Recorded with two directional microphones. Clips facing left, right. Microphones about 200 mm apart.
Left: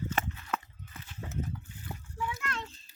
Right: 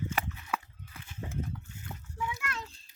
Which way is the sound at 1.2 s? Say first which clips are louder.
Even; 15° right (ahead or behind).